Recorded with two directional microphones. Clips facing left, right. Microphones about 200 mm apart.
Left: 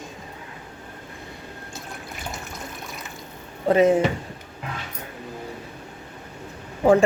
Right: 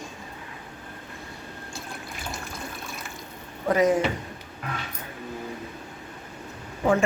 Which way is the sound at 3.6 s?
25° left (ahead or behind).